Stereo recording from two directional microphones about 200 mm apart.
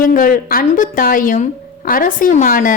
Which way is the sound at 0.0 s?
45° left (ahead or behind).